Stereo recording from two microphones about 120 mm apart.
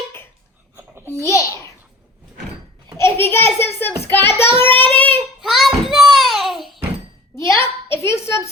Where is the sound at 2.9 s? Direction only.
20° left (ahead or behind).